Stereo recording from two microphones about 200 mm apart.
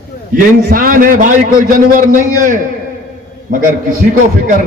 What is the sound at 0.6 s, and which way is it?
A man's voice, 45° right (ahead or behind).